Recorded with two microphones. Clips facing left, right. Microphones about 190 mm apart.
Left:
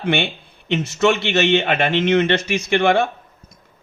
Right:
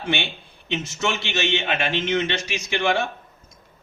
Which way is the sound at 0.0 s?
60° left (ahead or behind).